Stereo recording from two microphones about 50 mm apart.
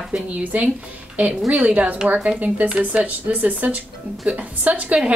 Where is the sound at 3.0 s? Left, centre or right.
Right.